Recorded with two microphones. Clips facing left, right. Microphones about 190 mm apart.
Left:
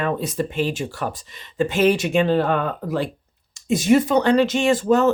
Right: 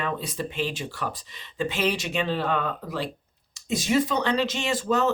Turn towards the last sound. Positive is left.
turn(degrees=50)  # may be behind; listen again after turning